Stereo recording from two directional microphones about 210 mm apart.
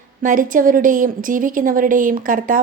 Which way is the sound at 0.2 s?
40° right (ahead or behind).